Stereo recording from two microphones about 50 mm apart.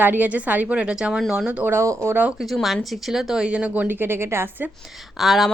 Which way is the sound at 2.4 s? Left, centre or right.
Centre.